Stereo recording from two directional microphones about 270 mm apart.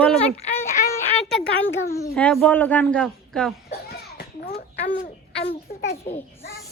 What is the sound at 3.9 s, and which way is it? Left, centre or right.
Children playing, left.